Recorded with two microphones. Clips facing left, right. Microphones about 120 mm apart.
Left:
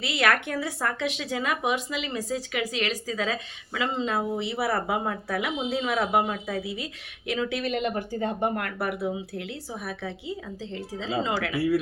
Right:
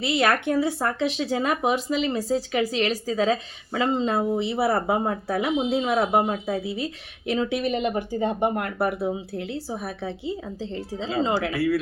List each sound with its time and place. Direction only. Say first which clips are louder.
0.0 s speech: right 3 dB; 30° right (ahead or behind)
7.6 s speech: right 3 dB; 20° right (ahead or behind)